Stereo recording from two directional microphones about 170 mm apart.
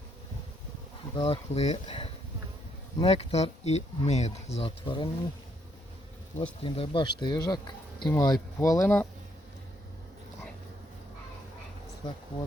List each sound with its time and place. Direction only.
1.1 s speech: 30° left (ahead or behind)
6.4 s speech: 30° left (ahead or behind); by 9.0 s 15° left (ahead or behind)
12.0 s speech: 25° left (ahead or behind)